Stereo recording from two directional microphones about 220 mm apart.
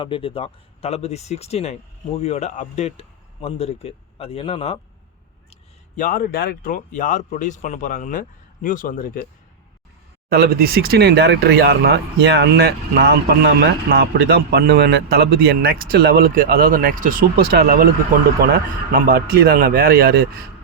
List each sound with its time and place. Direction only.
0.0 s speech: 25° left (ahead or behind)
6.0 s speech: 40° left (ahead or behind)
10.2 s speech: 45° right (ahead or behind)